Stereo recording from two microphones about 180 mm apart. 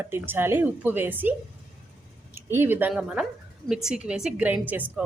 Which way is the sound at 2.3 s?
15° right (ahead or behind).